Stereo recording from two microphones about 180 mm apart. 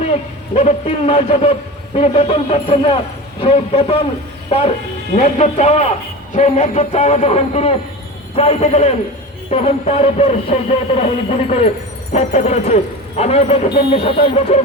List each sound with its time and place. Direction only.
0.5 s speech: 35° left (ahead or behind)
5.1 s speech: 45° left (ahead or behind)